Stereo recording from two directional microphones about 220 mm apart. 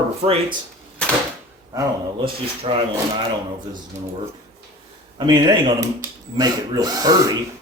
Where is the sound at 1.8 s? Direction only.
25° right (ahead or behind).